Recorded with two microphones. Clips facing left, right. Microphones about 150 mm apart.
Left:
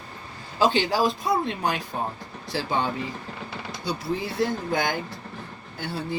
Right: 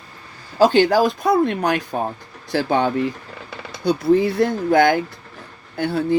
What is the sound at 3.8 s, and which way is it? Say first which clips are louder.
Speech: right 13 dB; 55° right (ahead or behind).